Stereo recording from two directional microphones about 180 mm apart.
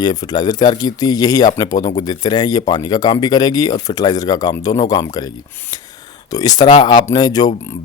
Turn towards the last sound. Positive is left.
turn(degrees=20)  # may be behind; listen again after turning